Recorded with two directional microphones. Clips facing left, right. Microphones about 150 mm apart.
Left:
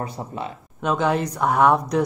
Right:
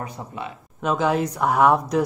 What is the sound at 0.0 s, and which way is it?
Speech, 35° left (ahead or behind).